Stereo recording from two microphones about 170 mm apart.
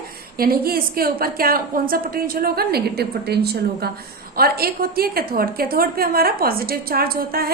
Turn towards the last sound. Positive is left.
turn(degrees=-60)  # may be behind; listen again after turning